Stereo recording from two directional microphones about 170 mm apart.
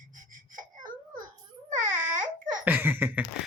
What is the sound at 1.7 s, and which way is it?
Baby cry, 50° right (ahead or behind).